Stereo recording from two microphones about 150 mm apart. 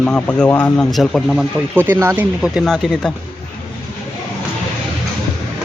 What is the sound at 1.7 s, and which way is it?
Speech, 15° right (ahead or behind).